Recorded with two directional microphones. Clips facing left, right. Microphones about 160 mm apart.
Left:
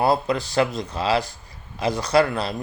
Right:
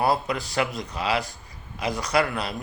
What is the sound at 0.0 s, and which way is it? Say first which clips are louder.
Speech: left 3 dB; 25° left (ahead or behind).